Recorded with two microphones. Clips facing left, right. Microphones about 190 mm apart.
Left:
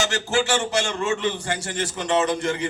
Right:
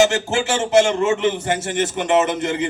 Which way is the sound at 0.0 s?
25° right (ahead or behind).